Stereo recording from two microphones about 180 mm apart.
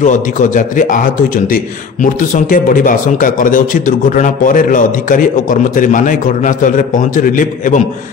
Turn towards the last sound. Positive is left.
turn(degrees=45)  # may be behind; listen again after turning